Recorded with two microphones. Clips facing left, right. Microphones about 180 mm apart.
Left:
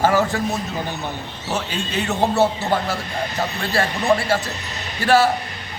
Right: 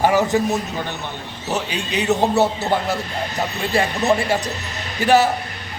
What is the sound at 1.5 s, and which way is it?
Speech, 15° right (ahead or behind).